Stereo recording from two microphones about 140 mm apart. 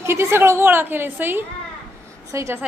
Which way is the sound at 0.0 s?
20° right (ahead or behind).